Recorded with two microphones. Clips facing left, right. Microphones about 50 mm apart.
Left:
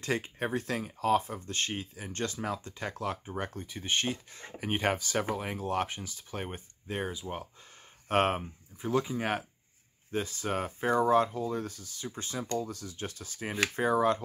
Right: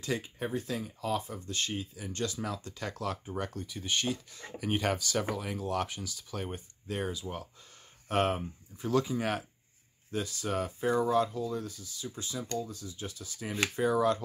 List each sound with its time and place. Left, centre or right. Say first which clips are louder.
0.0 s speech: left 2 dB; left
8.1 s speech: left 2 dB; left
8.7 s speech: right 1 dB; centre
10.1 s speech: left 1 dB; left
12.5 s speech: left 2 dB; left